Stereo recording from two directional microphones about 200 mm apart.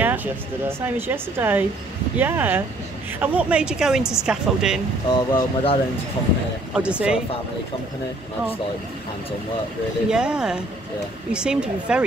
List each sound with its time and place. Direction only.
0.0 s a woman's voice: 10° right (ahead or behind)
5.1 s speech: 25° left (ahead or behind)
6.7 s a woman's voice: 5° right (ahead or behind)
10.1 s a woman's voice: 5° right (ahead or behind)